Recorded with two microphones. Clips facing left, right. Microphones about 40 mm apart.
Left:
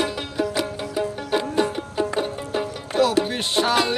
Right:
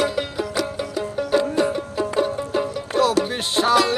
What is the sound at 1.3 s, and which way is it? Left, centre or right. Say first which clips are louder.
Music: right 3 dB; left.